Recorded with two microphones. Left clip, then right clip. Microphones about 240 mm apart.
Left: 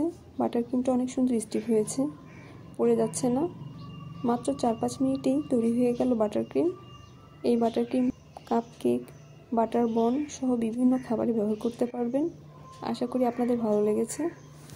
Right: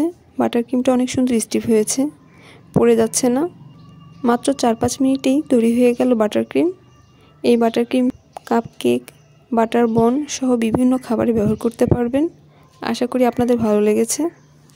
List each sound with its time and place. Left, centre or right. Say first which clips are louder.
0.0 s a woman's voice: right 9 dB; right
11.4 s speech: right 11 dB; right